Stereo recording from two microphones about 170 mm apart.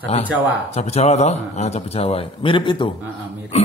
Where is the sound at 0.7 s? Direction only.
40° left (ahead or behind).